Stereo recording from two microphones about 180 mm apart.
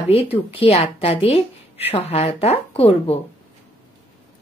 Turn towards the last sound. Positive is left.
turn(degrees=35)  # may be behind; listen again after turning